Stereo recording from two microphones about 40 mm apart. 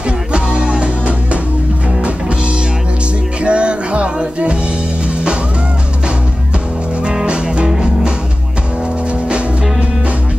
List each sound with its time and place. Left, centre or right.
0.3 s music: right
3.4 s music: right
7.2 s music: right